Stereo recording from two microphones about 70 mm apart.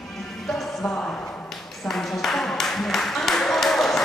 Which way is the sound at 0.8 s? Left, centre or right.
Centre.